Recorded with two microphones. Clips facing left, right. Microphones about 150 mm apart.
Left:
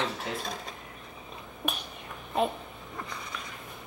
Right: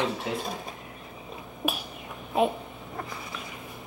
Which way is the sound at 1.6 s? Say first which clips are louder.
Right 4 dB; 5° right (ahead or behind).